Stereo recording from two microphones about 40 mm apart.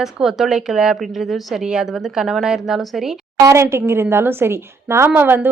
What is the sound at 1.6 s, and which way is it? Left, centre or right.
A woman's voice, centre.